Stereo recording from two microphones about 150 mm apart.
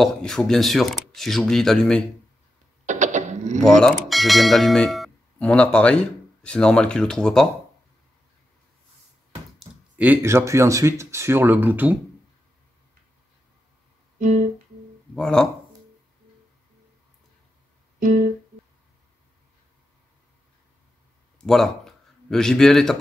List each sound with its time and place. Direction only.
0.0 s speech: 5° left (ahead or behind)
2.9 s a sound: 55° right (ahead or behind)
3.6 s speech: 5° left (ahead or behind)
9.6 s speech: 10° right (ahead or behind)
15.1 s speech: 5° left (ahead or behind)
17.9 s music: 60° right (ahead or behind)
21.4 s speech: centre (ahead or behind)